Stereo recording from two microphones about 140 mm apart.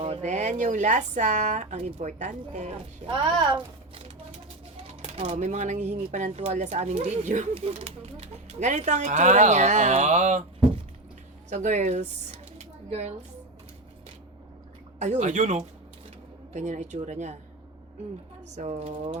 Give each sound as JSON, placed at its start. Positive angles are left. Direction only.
{"t": 0.0, "sound": "speech", "side_deg": -55}
{"t": 3.1, "sound": "a child's voice", "side_deg": -35}
{"t": 5.0, "sound": "speech", "side_deg": -50}
{"t": 7.5, "sound": "speech", "side_deg": -45}
{"t": 11.4, "sound": "speech", "side_deg": -55}
{"t": 12.5, "sound": "a sound", "side_deg": -50}
{"t": 14.9, "sound": "speech", "side_deg": -55}
{"t": 18.5, "sound": "speech", "side_deg": -55}